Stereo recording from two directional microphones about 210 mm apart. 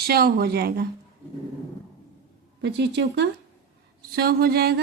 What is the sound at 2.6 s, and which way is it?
Speech, 55° right (ahead or behind).